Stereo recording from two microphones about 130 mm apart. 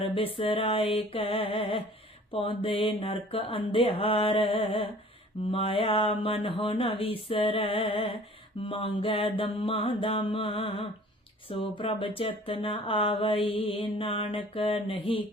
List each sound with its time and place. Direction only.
0.0 s speech: 40° left (ahead or behind)